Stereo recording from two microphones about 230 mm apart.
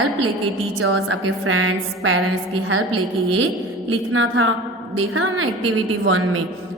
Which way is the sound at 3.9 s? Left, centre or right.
Right.